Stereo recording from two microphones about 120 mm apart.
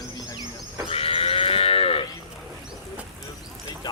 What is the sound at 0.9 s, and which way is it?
Livestock, 55° left (ahead or behind).